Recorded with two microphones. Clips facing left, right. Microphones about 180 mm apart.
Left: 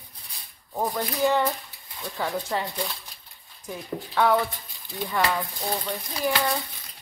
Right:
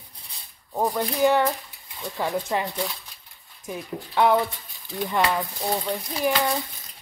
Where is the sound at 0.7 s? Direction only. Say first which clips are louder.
Right 3 dB; 15° right (ahead or behind).